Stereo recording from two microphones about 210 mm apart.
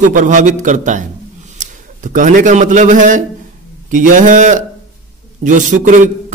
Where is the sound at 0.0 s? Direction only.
35° right (ahead or behind).